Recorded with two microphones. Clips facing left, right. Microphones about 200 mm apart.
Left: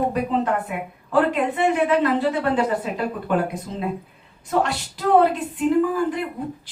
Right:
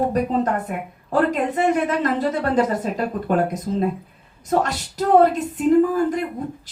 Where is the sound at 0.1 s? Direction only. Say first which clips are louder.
Right 2 dB; 40° right (ahead or behind).